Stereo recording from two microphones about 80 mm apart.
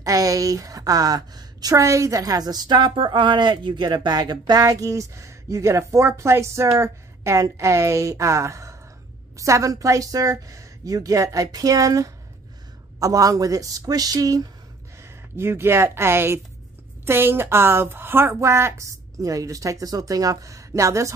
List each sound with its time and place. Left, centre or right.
0.0 s a woman's voice: right
15.0 s a woman's voice: right